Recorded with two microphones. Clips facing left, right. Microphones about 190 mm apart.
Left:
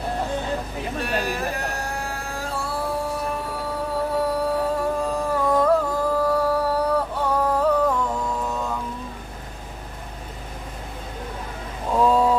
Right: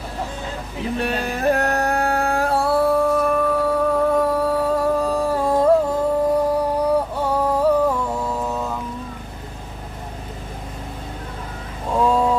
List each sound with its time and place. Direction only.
1.0 s music: 60° right (ahead or behind); by 8.3 s 10° right (ahead or behind)
12.0 s mantra: centre (ahead or behind)